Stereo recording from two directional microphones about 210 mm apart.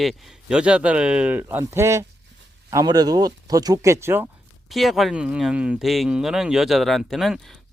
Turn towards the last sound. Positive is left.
turn(degrees=0)  # may be behind; listen again after turning